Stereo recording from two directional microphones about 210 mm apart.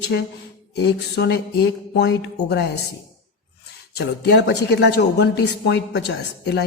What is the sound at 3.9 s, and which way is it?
Speech, 50° left (ahead or behind).